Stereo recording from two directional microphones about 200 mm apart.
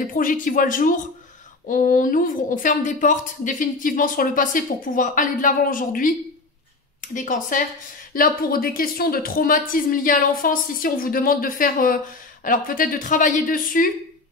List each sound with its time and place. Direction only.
0.1 s a woman's voice: 40° left (ahead or behind)